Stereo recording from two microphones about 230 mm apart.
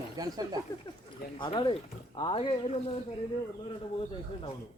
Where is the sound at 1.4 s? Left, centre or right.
Left.